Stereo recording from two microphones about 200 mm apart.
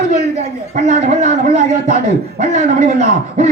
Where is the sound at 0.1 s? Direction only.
35° right (ahead or behind).